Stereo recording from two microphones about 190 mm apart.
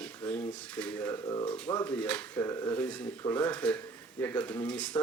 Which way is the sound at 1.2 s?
25° left (ahead or behind).